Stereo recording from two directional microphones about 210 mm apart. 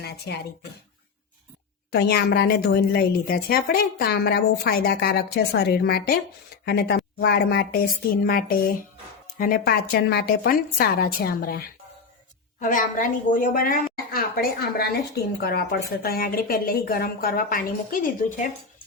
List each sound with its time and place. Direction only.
0.0 s speech: 50° left (ahead or behind)
1.9 s a woman's voice: 50° left (ahead or behind)